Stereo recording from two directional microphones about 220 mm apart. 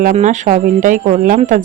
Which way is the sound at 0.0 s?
35° right (ahead or behind).